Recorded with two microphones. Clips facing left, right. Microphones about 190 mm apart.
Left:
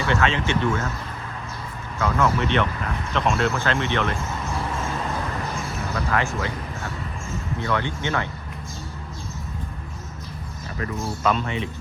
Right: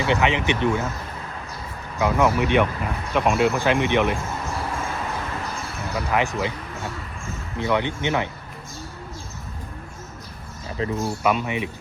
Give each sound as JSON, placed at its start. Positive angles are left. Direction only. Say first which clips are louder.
{"t": 0.0, "sound": "speech", "louder": "right 2 dB", "side_deg": -15}
{"t": 2.0, "sound": "speech", "louder": "right 2 dB", "side_deg": -15}
{"t": 6.1, "sound": "speech", "louder": "right 3 dB", "side_deg": -15}
{"t": 7.6, "sound": "speech", "louder": "right 4 dB", "side_deg": -15}
{"t": 11.0, "sound": "speech", "louder": "even", "side_deg": -15}